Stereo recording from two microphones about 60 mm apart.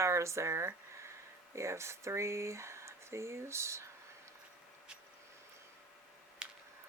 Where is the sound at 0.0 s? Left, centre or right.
Right.